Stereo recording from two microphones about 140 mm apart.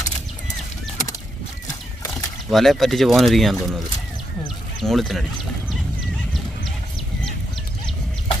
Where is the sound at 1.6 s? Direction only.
20° left (ahead or behind).